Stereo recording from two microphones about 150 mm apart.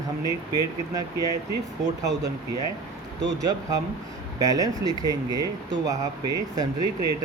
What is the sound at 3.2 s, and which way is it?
Speech, 25° right (ahead or behind).